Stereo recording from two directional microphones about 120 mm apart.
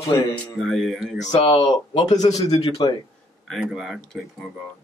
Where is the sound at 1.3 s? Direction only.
40° left (ahead or behind).